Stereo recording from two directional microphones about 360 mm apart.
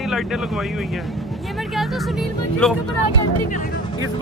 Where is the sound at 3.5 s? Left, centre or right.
Left.